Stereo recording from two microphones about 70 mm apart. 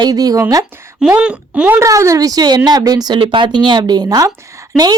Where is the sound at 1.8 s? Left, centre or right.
Right.